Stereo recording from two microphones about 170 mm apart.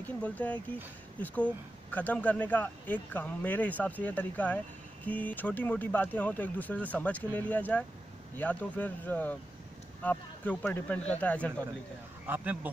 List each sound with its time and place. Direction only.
0.0 s speech: 10° left (ahead or behind)
12.3 s speech: 10° right (ahead or behind)